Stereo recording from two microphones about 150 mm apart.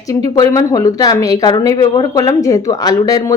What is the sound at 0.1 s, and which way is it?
Speech, 25° left (ahead or behind).